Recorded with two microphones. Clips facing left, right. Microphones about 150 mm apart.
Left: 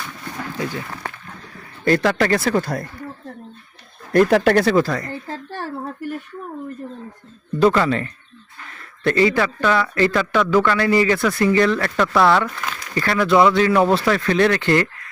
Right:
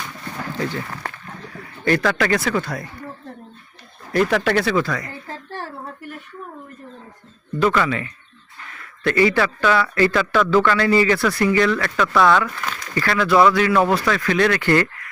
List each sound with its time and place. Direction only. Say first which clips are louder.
0.5 s speech: right 2 dB; 15° left (ahead or behind)
1.9 s speech: left 2 dB; 25° left (ahead or behind)
4.3 s speech: left 4 dB; 40° left (ahead or behind)
7.6 s speech: left 3 dB; 35° left (ahead or behind)
8.8 s a sound: left 1 dB; 30° left (ahead or behind)
9.3 s speech: even; 20° left (ahead or behind)